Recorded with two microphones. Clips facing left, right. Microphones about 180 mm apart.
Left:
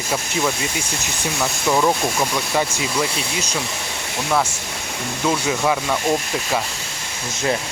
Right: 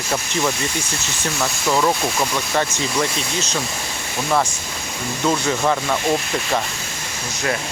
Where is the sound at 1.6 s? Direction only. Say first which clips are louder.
Left 1 dB; 10° left (ahead or behind).